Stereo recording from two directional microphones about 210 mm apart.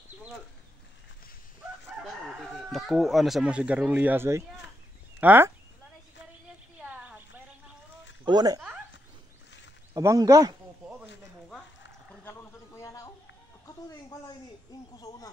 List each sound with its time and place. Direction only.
2.0 s speech: centre (ahead or behind)
6.8 s a sound: 5° right (ahead or behind)
8.3 s speech: 20° right (ahead or behind)
9.9 s speech: 15° right (ahead or behind)
12.2 s a sound: 10° left (ahead or behind)
13.7 s speech: 15° left (ahead or behind)